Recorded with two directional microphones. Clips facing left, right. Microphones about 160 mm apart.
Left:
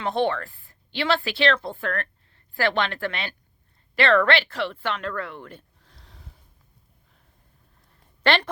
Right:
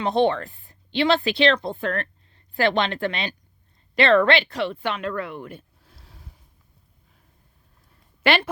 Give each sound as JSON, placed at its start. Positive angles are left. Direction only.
{"t": 0.0, "sound": "a woman's voice", "side_deg": -20}
{"t": 8.2, "sound": "speech", "side_deg": -10}